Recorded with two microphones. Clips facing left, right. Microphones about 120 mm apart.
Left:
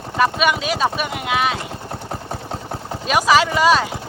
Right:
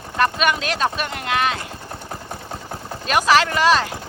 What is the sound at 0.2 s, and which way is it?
Speech, 5° left (ahead or behind).